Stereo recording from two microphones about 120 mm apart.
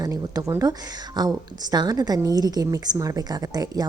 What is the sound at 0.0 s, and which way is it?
A woman's voice, 30° right (ahead or behind).